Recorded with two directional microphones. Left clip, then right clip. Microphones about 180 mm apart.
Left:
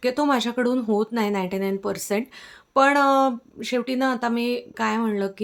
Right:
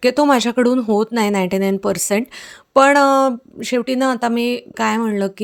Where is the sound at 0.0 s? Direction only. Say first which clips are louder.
Right 8 dB; 50° right (ahead or behind).